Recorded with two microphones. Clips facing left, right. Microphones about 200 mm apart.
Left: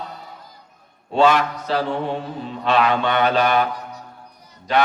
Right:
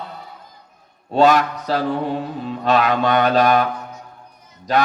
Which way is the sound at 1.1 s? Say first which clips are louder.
Right 2 dB; 40° right (ahead or behind).